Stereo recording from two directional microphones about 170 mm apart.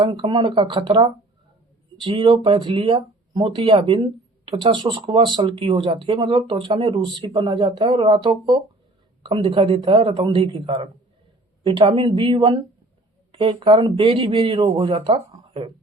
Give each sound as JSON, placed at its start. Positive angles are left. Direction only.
{"t": 0.0, "sound": "speech", "side_deg": -30}